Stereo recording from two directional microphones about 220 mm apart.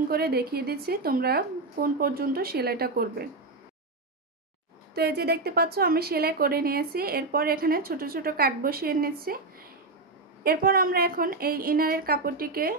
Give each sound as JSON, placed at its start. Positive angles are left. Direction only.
{"t": 0.1, "sound": "a woman's voice", "side_deg": -45}
{"t": 4.9, "sound": "a woman's voice", "side_deg": -45}
{"t": 10.4, "sound": "a woman's voice", "side_deg": -40}